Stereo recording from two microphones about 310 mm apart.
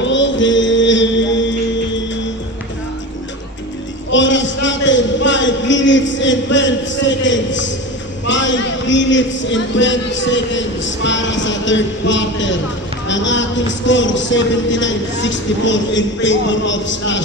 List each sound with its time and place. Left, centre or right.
0.0 s music: left
4.1 s a man's voice: left